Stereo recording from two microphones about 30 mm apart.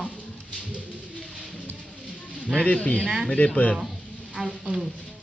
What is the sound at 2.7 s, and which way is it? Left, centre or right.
Speech, left.